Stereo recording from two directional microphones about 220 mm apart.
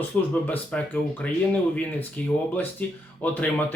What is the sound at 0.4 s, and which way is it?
Speech, 10° left (ahead or behind).